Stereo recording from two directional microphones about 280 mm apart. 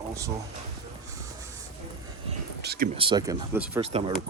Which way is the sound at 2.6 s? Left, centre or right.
Right.